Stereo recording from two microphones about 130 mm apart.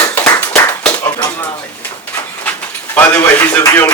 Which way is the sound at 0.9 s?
25° left (ahead or behind).